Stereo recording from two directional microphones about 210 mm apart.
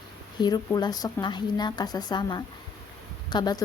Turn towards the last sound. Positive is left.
turn(degrees=20)  # may be behind; listen again after turning